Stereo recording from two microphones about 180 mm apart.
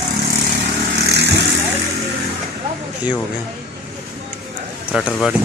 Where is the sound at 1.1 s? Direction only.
70° right (ahead or behind).